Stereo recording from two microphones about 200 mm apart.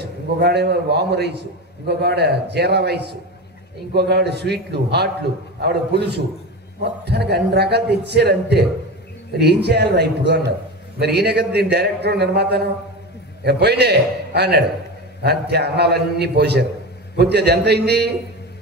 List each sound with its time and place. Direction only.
0.0 s a man's voice: 55° right (ahead or behind)